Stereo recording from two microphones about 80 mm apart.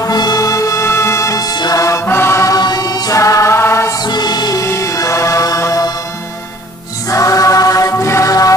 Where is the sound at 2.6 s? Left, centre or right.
Left.